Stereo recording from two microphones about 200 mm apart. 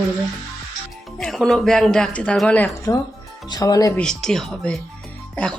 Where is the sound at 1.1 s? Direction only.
Centre (ahead or behind).